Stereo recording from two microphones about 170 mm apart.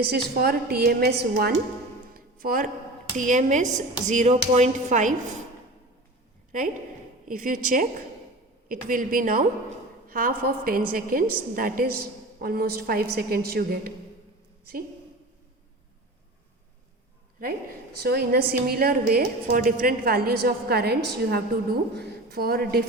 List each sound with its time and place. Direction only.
0.0 s a woman's voice: 65° right (ahead or behind)
2.1 s music: 55° right (ahead or behind)
3.2 s speech: 50° right (ahead or behind)
7.3 s a woman's voice: 50° right (ahead or behind)
18.0 s a woman's voice: 65° right (ahead or behind)